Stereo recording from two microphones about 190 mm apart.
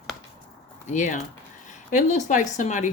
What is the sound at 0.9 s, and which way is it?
Speech, 40° left (ahead or behind).